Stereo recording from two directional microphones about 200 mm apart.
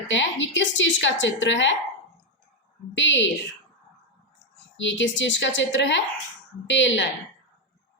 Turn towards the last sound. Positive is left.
turn(degrees=65)  # may be behind; listen again after turning